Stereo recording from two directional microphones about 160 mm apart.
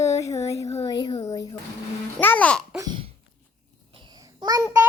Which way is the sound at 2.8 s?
25° right (ahead or behind).